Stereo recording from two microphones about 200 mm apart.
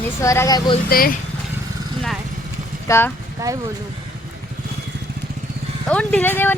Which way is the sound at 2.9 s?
10° left (ahead or behind).